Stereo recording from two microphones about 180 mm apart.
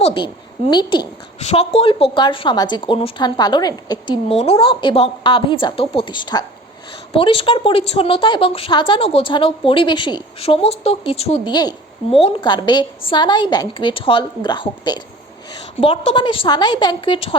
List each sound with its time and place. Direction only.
0.0 s a woman's voice: 30° left (ahead or behind)
1.4 s a woman's voice: 35° left (ahead or behind)